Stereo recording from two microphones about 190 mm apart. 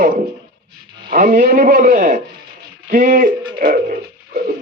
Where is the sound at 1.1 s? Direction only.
50° right (ahead or behind).